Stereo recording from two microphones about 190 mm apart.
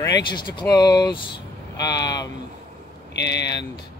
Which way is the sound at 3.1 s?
65° left (ahead or behind).